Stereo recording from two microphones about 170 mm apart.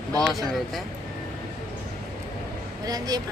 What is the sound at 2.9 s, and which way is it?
Speech, 25° right (ahead or behind).